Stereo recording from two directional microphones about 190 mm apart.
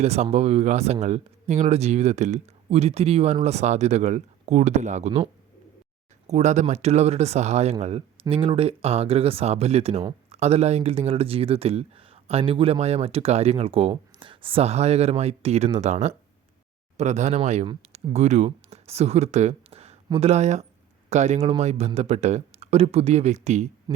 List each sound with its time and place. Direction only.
0.0 s speech: 35° right (ahead or behind)
6.2 s speech: 35° right (ahead or behind)